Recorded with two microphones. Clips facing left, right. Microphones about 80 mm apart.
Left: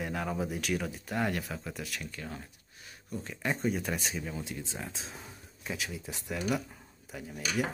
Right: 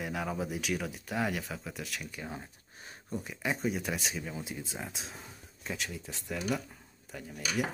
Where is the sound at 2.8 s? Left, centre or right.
Right.